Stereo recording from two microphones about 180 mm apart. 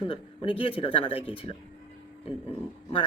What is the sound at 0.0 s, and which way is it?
Speech, 30° left (ahead or behind).